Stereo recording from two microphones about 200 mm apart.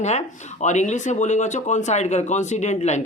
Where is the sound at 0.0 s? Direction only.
35° left (ahead or behind).